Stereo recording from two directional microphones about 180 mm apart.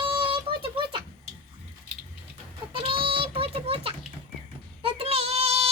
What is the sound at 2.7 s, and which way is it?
Child singing, 30° right (ahead or behind).